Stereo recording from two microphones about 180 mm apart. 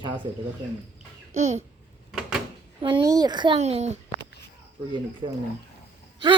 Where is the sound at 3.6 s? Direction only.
40° right (ahead or behind).